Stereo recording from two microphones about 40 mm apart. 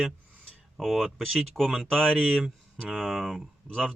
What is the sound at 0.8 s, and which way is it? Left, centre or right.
Speech, centre.